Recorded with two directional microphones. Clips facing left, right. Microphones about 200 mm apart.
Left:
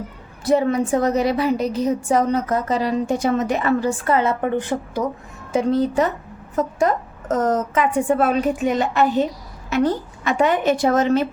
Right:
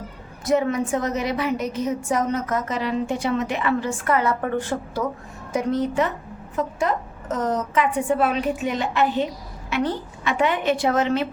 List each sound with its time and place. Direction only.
0.4 s a woman's voice: 35° left (ahead or behind); by 5.0 s 20° left (ahead or behind)
5.5 s a woman's voice: 30° left (ahead or behind)